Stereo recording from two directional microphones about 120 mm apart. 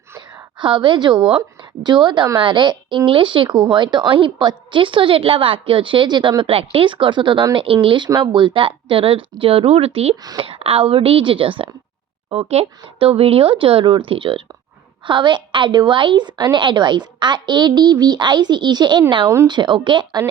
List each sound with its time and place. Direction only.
0.2 s a sound: 30° right (ahead or behind)
0.6 s a woman's voice: 45° right (ahead or behind)
10.2 s a woman's voice: 35° right (ahead or behind)
10.4 s a woman's voice: 50° right (ahead or behind)